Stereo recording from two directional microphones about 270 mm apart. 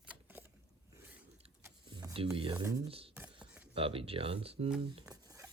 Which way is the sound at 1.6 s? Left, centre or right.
Centre.